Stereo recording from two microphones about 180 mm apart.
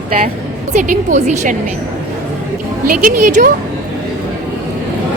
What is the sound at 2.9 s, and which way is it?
Speech, 50° right (ahead or behind).